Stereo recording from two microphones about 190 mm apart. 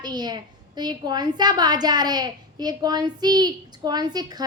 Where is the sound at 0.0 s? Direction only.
20° right (ahead or behind).